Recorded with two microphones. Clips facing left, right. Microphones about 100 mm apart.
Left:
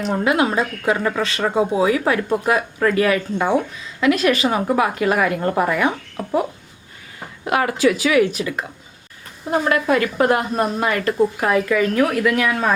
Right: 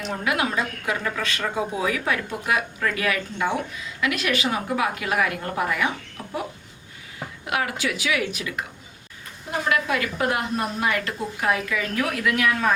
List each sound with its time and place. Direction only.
0.0 s a woman's voice: 30° left (ahead or behind); by 6.3 s 55° left (ahead or behind)
7.4 s a woman's voice: 40° left (ahead or behind)